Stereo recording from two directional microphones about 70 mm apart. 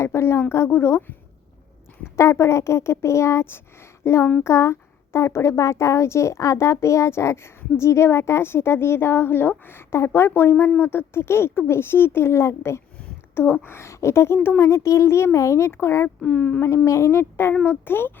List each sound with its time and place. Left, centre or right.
0.0 s a woman's voice: left
2.1 s a child's voice: left
4.0 s a sound: left
4.4 s a woman's voice: left
14.6 s a child's voice: left
16.2 s speech: left
16.6 s a woman's voice: left